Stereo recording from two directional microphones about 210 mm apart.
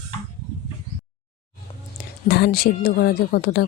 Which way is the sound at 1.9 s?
50° left (ahead or behind).